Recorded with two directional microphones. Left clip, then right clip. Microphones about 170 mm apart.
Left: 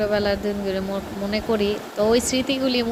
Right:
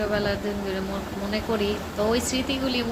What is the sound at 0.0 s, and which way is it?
Speech, 45° left (ahead or behind).